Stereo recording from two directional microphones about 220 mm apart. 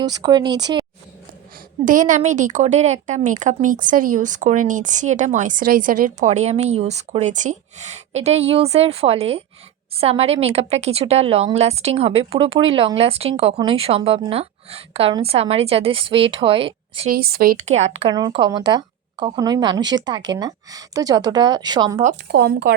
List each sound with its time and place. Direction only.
0.0 s a woman's voice: 20° right (ahead or behind)
1.8 s a woman's voice: 35° right (ahead or behind)
17.1 s a woman's voice: 45° right (ahead or behind); by 22.0 s 20° right (ahead or behind)
22.3 s speech: 50° right (ahead or behind)